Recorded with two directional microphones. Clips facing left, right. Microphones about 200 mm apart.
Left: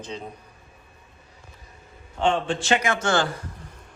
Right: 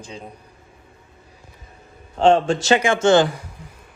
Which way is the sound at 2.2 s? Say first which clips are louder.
Right 7 dB; 40° right (ahead or behind).